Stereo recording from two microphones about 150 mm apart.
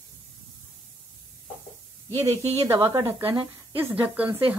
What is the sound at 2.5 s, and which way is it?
Speech, 15° right (ahead or behind).